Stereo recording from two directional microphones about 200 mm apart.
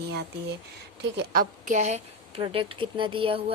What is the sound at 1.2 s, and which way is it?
A woman's voice, 40° right (ahead or behind).